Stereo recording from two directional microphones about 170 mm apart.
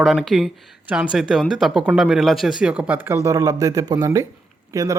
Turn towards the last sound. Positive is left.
turn(degrees=-20)  # may be behind; listen again after turning